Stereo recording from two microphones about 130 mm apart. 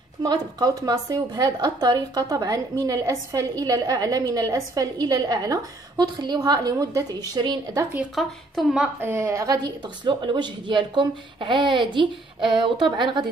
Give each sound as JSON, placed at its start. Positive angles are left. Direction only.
{"t": 0.2, "sound": "a woman's voice", "side_deg": -30}
{"t": 8.1, "sound": "speech", "side_deg": 0}
{"t": 9.0, "sound": "a woman's voice", "side_deg": -20}
{"t": 10.0, "sound": "speech", "side_deg": -35}